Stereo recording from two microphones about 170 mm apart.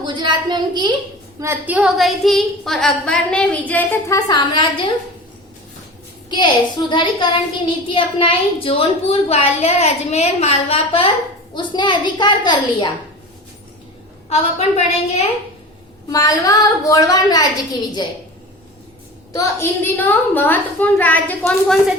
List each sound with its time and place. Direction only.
0.0 s speech: 25° right (ahead or behind)
1.4 s a woman's voice: 10° right (ahead or behind); by 4.2 s 10° left (ahead or behind)
4.3 s a child's voice: 25° left (ahead or behind)
6.3 s a child's voice: 25° left (ahead or behind)
14.3 s a child's voice: 40° left (ahead or behind)
16.0 s a child's voice: 20° left (ahead or behind)
19.3 s a woman's voice: 20° left (ahead or behind); by 21.9 s centre (ahead or behind)